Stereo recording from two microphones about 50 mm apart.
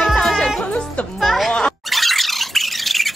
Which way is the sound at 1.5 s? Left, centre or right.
Centre.